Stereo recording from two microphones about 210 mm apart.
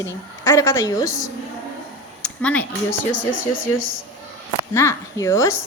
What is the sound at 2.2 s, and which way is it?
Speech, 5° left (ahead or behind).